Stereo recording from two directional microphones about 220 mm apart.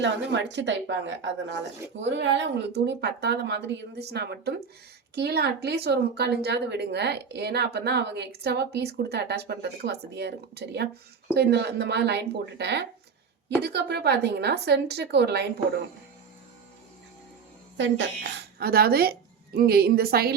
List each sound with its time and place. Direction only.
0.0 s speech: 55° right (ahead or behind)
17.7 s speech: 55° right (ahead or behind)